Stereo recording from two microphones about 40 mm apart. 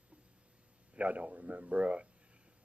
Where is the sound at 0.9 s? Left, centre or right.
Right.